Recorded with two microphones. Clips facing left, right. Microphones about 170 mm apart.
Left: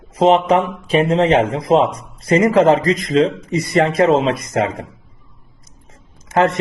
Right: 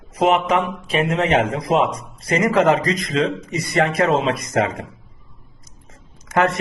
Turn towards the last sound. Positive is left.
turn(degrees=25)  # may be behind; listen again after turning